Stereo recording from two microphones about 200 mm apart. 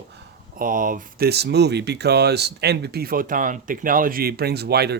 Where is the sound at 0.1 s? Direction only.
45° right (ahead or behind).